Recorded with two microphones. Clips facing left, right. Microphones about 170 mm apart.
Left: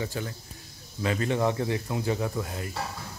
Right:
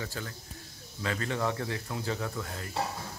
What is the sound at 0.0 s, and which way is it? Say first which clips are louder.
Speech: left 6 dB; 15° left (ahead or behind).